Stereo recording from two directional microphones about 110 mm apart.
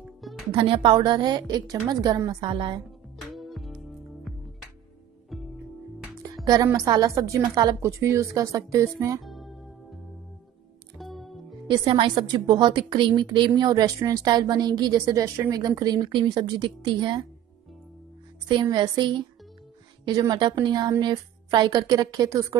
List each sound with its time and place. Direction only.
0.0 s music: centre (ahead or behind)
0.5 s a woman's voice: 50° right (ahead or behind)
3.3 s music: centre (ahead or behind)
6.4 s a woman's voice: 30° right (ahead or behind)
7.4 s a woman's voice: 40° right (ahead or behind)
7.8 s speech: 25° right (ahead or behind)
9.2 s music: centre (ahead or behind)
11.0 s music: centre (ahead or behind)
11.8 s a woman's voice: 55° right (ahead or behind)
18.5 s a woman's voice: 40° right (ahead or behind)